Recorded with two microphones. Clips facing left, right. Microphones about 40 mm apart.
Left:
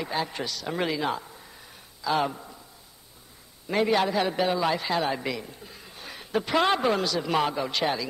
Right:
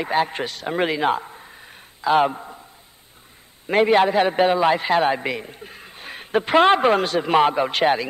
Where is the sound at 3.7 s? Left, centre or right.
Right.